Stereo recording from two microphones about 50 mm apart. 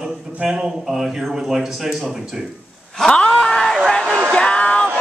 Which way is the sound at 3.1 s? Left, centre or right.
Centre.